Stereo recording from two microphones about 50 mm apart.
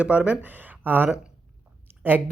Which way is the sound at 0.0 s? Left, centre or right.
Right.